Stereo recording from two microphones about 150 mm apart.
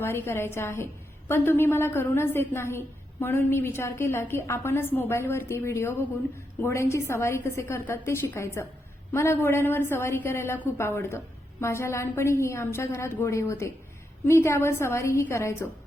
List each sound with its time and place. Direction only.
0.0 s a woman's voice: 15° left (ahead or behind)